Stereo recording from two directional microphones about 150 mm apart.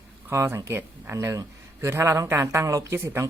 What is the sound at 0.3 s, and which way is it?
Speech, 15° right (ahead or behind).